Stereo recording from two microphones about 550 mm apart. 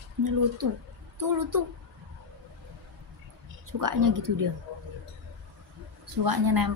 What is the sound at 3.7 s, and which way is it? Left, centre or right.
Speech, right.